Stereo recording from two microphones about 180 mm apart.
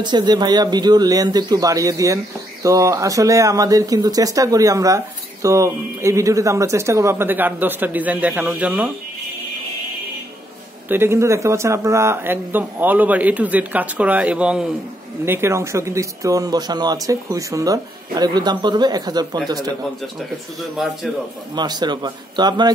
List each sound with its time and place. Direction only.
0.0 s speech: 25° right (ahead or behind); by 8.9 s 5° right (ahead or behind)
10.9 s speech: 15° right (ahead or behind)
20.7 s a man's voice: centre (ahead or behind)
21.5 s speech: 25° right (ahead or behind)